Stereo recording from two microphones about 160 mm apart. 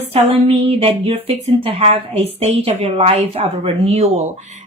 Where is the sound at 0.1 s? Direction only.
40° right (ahead or behind).